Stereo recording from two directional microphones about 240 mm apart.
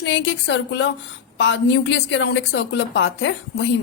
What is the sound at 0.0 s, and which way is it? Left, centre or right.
A woman's voice, left.